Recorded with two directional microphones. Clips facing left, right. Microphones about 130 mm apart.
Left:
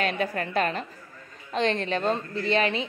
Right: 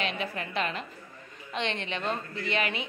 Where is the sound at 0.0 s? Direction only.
45° left (ahead or behind).